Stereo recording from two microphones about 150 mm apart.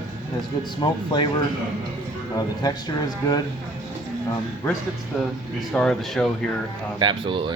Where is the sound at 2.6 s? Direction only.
25° left (ahead or behind).